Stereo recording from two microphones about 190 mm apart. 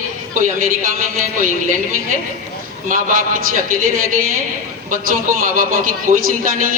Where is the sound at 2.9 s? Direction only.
45° right (ahead or behind).